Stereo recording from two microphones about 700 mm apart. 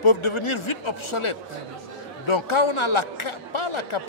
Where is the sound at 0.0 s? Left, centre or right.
Left.